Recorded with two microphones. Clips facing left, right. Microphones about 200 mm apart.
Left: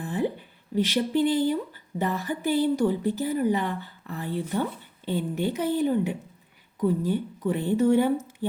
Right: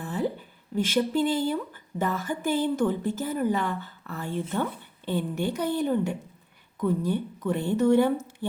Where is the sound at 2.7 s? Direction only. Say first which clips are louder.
Left 1 dB; 10° left (ahead or behind).